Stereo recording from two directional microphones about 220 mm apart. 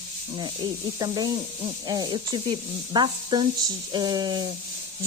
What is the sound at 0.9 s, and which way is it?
Speech, 20° right (ahead or behind).